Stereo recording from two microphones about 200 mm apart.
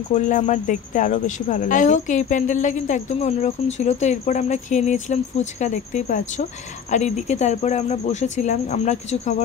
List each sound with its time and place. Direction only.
0.1 s speech: 35° left (ahead or behind)